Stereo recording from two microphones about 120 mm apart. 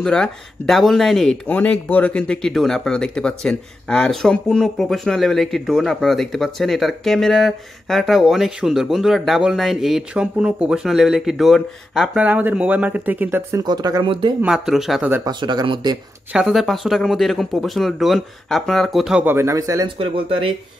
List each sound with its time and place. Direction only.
0.0 s speech: 5° left (ahead or behind)
12.2 s speech: 10° right (ahead or behind)
13.7 s speech: 35° right (ahead or behind)
14.4 s speech: 5° right (ahead or behind)
15.2 s speech: 35° right (ahead or behind)
16.3 s speech: 5° right (ahead or behind)
19.2 s speech: 20° right (ahead or behind)
20.0 s speech: 45° right (ahead or behind)